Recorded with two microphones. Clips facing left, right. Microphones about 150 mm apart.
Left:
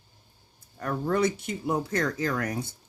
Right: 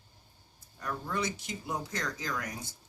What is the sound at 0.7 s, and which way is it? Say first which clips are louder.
Speech: left 8 dB; 60° left (ahead or behind).